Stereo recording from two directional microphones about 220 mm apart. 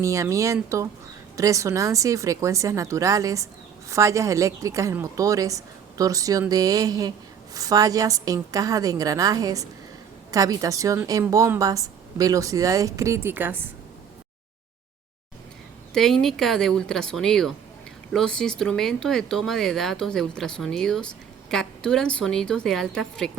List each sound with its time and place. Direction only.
0.0 s speech: 15° right (ahead or behind)
15.9 s speech: centre (ahead or behind)